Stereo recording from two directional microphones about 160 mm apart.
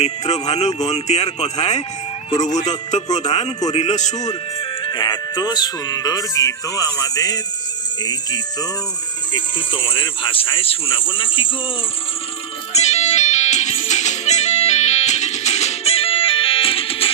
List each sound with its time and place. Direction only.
0.0 s a man's voice: 45° left (ahead or behind)
4.8 s speech: 25° left (ahead or behind)
12.7 s music: 45° left (ahead or behind)